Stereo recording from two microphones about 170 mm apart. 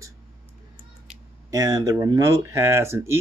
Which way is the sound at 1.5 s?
20° right (ahead or behind).